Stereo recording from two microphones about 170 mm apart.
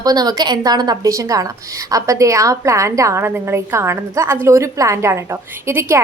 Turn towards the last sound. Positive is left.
turn(degrees=-15)  # may be behind; listen again after turning